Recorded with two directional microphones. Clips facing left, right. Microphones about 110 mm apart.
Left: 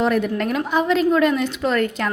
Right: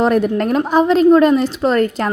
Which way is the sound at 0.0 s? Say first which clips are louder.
Right 5 dB; 40° right (ahead or behind).